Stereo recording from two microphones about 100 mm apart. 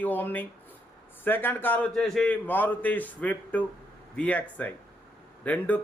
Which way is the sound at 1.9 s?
Centre (ahead or behind).